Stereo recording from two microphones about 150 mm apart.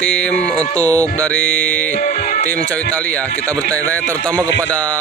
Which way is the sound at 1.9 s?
60° left (ahead or behind).